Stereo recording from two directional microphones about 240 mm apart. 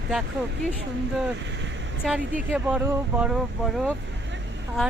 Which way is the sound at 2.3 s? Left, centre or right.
Centre.